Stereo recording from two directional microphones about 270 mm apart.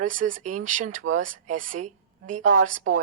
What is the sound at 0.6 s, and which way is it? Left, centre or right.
Speech, right.